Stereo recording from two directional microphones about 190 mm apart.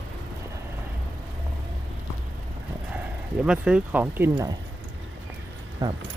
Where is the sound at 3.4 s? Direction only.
5° right (ahead or behind).